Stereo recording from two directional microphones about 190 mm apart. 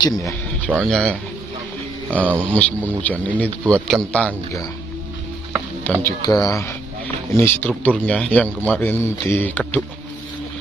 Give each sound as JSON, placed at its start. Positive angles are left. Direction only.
{"t": 0.0, "sound": "a sound", "side_deg": 15}
{"t": 0.7, "sound": "a man's voice", "side_deg": 5}
{"t": 2.1, "sound": "speech", "side_deg": -10}
{"t": 2.5, "sound": "a man's voice", "side_deg": 5}
{"t": 6.2, "sound": "speech", "side_deg": 20}